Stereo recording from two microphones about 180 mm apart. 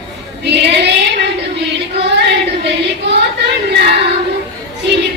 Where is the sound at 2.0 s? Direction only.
70° right (ahead or behind).